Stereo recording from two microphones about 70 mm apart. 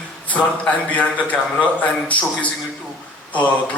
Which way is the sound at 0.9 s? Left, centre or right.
Left.